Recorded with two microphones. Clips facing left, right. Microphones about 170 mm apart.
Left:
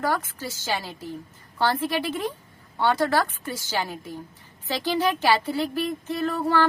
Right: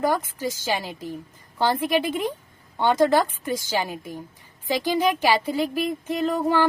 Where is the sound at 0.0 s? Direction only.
15° right (ahead or behind).